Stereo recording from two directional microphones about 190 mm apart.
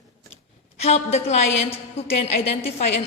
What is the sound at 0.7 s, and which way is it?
A woman's voice, 35° left (ahead or behind).